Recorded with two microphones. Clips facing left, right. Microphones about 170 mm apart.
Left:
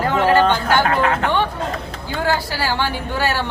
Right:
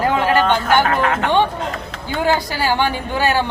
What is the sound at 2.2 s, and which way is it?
Speech, 20° right (ahead or behind).